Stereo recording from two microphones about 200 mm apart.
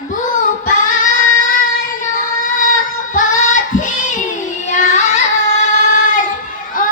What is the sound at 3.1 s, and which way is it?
Child singing, 40° left (ahead or behind).